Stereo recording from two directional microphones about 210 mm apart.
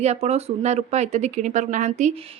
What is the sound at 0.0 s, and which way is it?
Speech, 30° right (ahead or behind).